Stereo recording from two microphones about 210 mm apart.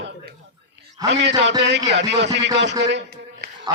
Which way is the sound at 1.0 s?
55° right (ahead or behind).